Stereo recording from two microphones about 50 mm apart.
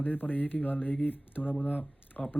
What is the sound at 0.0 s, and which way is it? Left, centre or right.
Speech, left.